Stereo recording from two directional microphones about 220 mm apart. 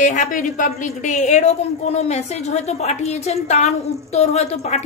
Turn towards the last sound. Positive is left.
turn(degrees=30)  # may be behind; listen again after turning